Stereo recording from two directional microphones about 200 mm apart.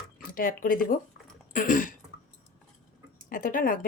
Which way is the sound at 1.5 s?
40° left (ahead or behind).